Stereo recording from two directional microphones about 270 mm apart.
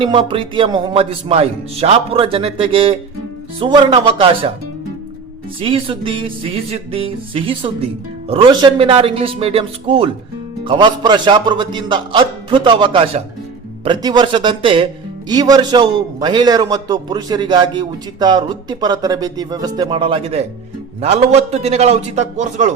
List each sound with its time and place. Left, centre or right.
0.0 s speech: centre
5.5 s a man's voice: centre